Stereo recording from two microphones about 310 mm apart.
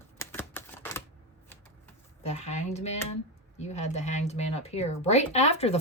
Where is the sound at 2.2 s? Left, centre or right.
Left.